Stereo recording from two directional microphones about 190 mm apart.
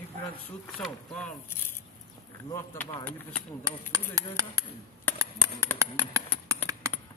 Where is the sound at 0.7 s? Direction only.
5° left (ahead or behind).